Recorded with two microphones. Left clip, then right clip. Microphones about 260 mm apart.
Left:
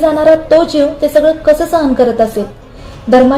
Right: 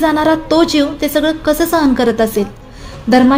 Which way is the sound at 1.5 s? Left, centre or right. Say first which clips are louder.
Left 2 dB; right.